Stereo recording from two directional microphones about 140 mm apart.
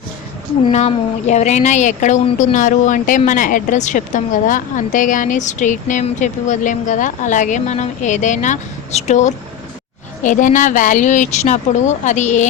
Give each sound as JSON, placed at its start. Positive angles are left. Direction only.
{"t": 0.7, "sound": "speech", "side_deg": 55}
{"t": 10.2, "sound": "speech", "side_deg": 70}